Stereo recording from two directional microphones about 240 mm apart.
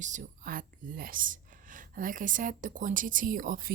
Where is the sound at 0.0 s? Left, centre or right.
Right.